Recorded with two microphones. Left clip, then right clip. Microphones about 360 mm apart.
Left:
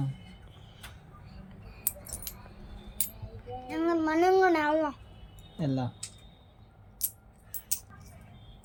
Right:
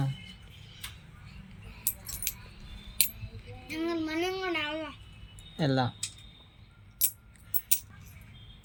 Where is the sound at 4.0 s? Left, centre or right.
Left.